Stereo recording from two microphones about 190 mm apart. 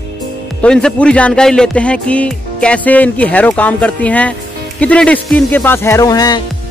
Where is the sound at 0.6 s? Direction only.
5° left (ahead or behind).